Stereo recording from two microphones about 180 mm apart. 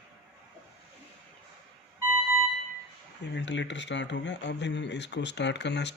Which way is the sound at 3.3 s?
80° left.